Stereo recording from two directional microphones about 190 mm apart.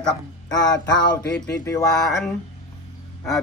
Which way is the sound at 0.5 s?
20° left (ahead or behind).